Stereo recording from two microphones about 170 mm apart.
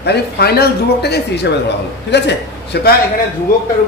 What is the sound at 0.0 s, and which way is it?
A man's voice, 70° left (ahead or behind).